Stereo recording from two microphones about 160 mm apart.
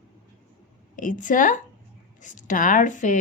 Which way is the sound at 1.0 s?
55° left (ahead or behind).